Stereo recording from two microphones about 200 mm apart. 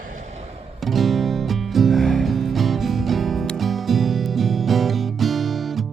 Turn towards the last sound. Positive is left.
turn(degrees=0)  # may be behind; listen again after turning